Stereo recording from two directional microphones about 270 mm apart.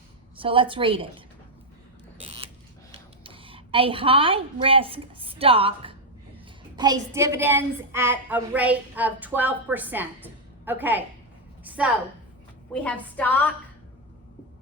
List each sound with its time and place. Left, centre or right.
0.3 s a woman's voice: centre
2.2 s creak: right
2.9 s a woman's voice: centre
11.6 s a sound: centre
12.7 s a woman's voice: centre